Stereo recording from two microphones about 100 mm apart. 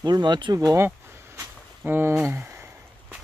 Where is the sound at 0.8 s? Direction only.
25° right (ahead or behind).